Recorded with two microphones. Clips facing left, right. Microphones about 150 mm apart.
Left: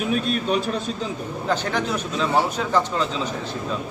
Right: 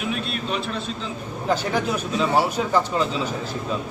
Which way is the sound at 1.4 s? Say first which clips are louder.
Right 1 dB; 10° right (ahead or behind).